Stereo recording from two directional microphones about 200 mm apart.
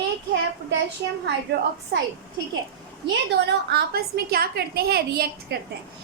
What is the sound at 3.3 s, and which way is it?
A woman's voice, 55° right (ahead or behind).